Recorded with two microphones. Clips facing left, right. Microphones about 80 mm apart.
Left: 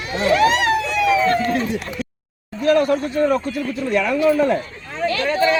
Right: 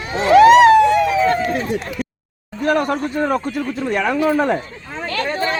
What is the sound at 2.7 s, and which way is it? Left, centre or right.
Speech, right.